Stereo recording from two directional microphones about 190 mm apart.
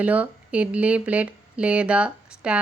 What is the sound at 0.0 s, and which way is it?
Speech, 5° right (ahead or behind).